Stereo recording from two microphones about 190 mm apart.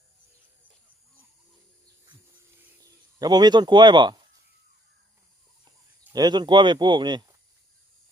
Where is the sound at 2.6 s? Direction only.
20° right (ahead or behind).